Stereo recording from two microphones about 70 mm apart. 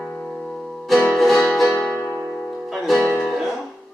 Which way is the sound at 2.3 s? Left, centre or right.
Centre.